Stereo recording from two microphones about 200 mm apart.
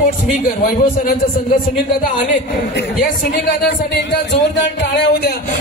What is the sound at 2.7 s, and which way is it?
Speech, 50° left (ahead or behind).